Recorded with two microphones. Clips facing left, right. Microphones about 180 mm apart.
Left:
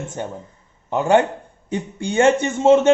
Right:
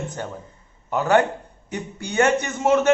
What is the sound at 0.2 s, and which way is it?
A man's voice, 20° left (ahead or behind).